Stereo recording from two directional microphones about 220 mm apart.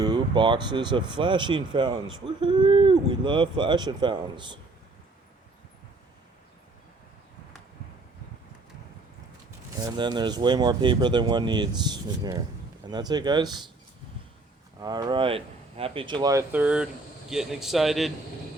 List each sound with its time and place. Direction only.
0.0 s speech: 20° right (ahead or behind)
9.8 s speech: 20° right (ahead or behind)
14.8 s speech: 20° right (ahead or behind); by 18.1 s centre (ahead or behind)